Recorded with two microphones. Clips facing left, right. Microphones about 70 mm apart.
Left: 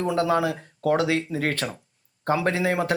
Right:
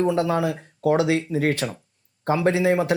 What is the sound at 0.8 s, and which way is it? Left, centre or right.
Speech, right.